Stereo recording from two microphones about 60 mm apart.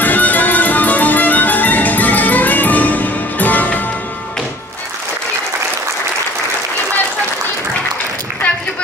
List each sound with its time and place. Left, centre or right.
0.0 s music: left